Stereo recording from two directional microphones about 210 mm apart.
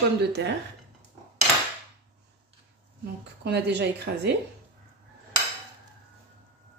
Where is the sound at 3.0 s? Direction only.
50° right (ahead or behind).